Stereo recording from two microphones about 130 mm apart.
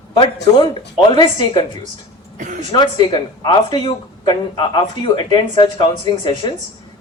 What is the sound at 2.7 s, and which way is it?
Speech, 35° left (ahead or behind).